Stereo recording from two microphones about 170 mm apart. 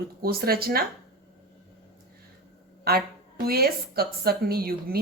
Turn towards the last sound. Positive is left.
turn(degrees=-65)  # may be behind; listen again after turning